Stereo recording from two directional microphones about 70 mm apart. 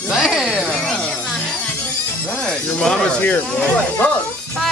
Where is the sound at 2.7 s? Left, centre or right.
Centre.